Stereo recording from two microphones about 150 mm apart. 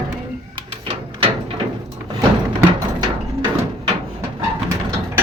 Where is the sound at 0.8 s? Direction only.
35° right (ahead or behind).